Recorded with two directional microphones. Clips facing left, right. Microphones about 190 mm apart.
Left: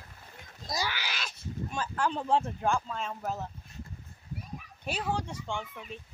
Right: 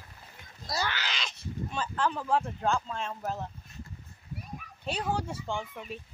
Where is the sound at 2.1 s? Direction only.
25° left (ahead or behind).